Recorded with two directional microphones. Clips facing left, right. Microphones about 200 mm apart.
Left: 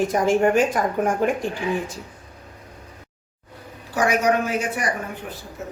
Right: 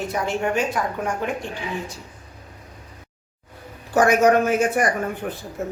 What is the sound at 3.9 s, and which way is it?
Speech, 50° right (ahead or behind).